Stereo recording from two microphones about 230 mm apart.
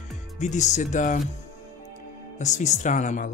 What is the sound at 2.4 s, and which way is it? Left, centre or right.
Speech, left.